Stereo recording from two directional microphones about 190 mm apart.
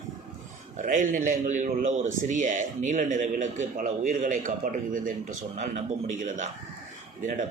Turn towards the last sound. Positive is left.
turn(degrees=-40)  # may be behind; listen again after turning